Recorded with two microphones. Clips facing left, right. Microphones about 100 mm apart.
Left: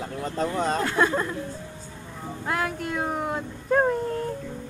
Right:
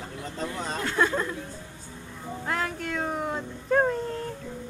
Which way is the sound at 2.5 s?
10° left (ahead or behind).